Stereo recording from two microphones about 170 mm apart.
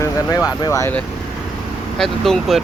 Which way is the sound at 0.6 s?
20° left (ahead or behind).